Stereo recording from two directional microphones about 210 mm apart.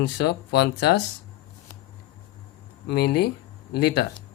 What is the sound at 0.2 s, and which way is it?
Speech, 55° left (ahead or behind).